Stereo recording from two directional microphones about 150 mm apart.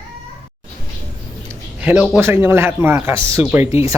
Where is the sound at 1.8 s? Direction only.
10° right (ahead or behind).